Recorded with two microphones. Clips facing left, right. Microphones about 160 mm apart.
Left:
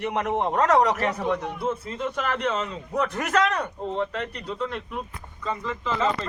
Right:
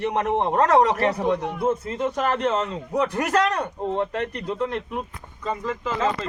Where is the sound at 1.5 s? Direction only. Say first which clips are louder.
Right 5 dB; 50° right (ahead or behind).